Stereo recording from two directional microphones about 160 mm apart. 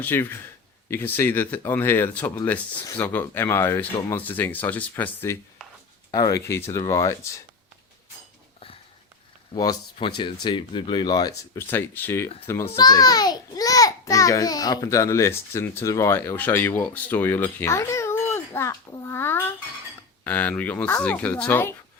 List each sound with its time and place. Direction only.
0.0 s speech: 15° left (ahead or behind)
9.6 s speech: 25° left (ahead or behind)
12.7 s a child's voice: 25° left (ahead or behind)